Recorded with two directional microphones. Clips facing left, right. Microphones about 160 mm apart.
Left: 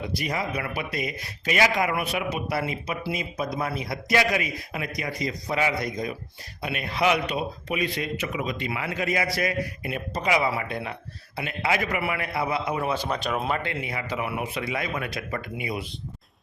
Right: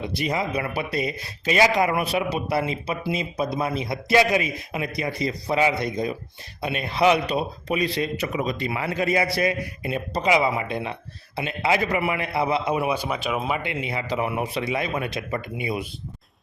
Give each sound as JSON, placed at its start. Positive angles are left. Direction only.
{"t": 0.2, "sound": "speech", "side_deg": -25}
{"t": 12.8, "sound": "speech", "side_deg": -10}